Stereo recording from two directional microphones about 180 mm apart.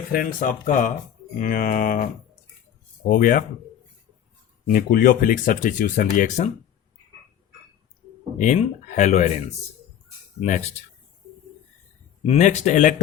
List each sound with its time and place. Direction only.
0.1 s speech: 50° left (ahead or behind)
3.1 s speech: 50° left (ahead or behind)
4.6 s speech: 50° left (ahead or behind)
8.4 s speech: 40° left (ahead or behind)
10.4 s speech: 40° left (ahead or behind)
12.2 s speech: 35° left (ahead or behind)